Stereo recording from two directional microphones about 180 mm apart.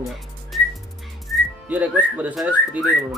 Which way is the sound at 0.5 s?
Centre (ahead or behind).